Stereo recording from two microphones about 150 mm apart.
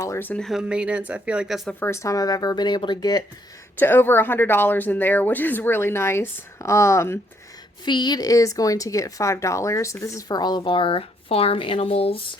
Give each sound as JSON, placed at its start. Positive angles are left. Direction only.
{"t": 0.0, "sound": "speech", "side_deg": 15}
{"t": 1.8, "sound": "speech", "side_deg": 20}
{"t": 3.8, "sound": "speech", "side_deg": 15}
{"t": 7.9, "sound": "speech", "side_deg": 30}